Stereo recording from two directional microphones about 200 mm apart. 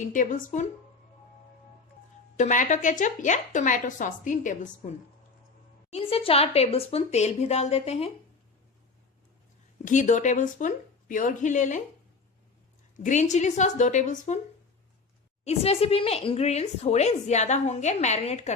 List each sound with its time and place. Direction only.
0.1 s a woman's voice: 40° left (ahead or behind)
2.4 s a woman's voice: 40° left (ahead or behind)
5.9 s a woman's voice: 30° left (ahead or behind)
9.8 s a woman's voice: 40° left (ahead or behind)
13.0 s a woman's voice: 40° left (ahead or behind)
15.4 s a woman's voice: 30° left (ahead or behind)